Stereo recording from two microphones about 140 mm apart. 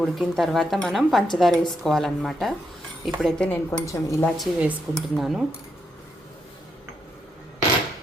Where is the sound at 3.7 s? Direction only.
20° left (ahead or behind).